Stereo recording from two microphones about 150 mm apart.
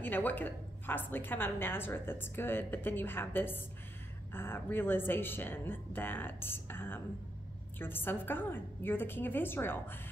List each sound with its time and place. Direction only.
0.0 s a woman's voice: 10° left (ahead or behind)